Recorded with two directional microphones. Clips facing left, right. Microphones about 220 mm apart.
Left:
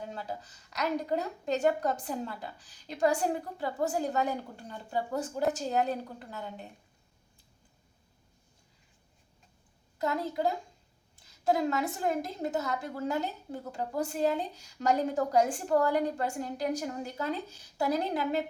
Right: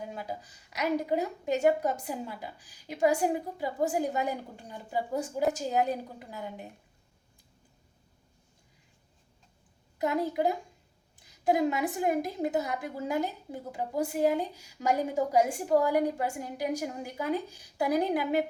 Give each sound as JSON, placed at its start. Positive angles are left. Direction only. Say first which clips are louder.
{"t": 0.0, "sound": "a woman's voice", "louder": "right 1 dB", "side_deg": -10}
{"t": 10.0, "sound": "a woman's voice", "louder": "right 2 dB", "side_deg": -15}